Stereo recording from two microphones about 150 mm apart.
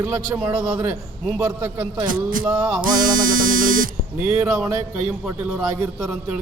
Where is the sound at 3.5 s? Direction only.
65° right (ahead or behind).